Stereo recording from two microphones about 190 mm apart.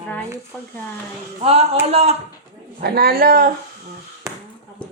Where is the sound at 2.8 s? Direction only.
55° right (ahead or behind).